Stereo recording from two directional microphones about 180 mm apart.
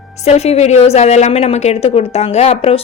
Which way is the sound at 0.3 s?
35° left (ahead or behind).